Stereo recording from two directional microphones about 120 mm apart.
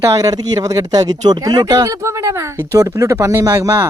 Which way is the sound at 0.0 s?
30° right (ahead or behind).